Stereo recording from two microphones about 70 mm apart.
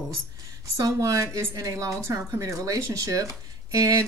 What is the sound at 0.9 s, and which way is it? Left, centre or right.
A woman's voice, right.